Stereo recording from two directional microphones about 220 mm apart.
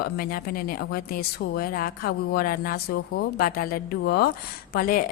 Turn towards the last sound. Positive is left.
turn(degrees=40)  # may be behind; listen again after turning